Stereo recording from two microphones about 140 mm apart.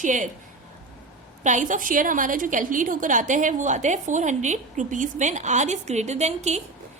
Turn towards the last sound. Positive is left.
turn(degrees=-55)  # may be behind; listen again after turning